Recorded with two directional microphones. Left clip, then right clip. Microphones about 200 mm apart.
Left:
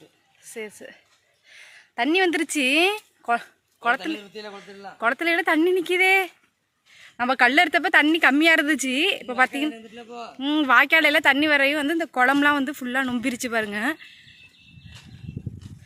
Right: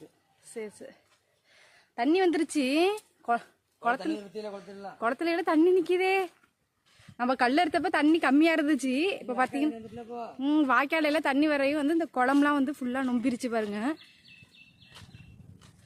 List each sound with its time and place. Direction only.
0.5 s speech: 5° left (ahead or behind)
2.0 s speech: 5° left (ahead or behind)
4.0 s speech: 65° right (ahead or behind)
4.9 s speech: centre (ahead or behind)
9.7 s a man's voice: 35° right (ahead or behind)
10.3 s speech: centre (ahead or behind)